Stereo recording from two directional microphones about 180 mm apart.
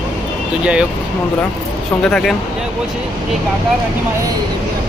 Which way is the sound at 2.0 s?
5° left (ahead or behind).